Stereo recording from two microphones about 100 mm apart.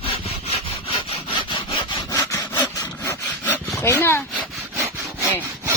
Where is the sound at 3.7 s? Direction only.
25° left (ahead or behind).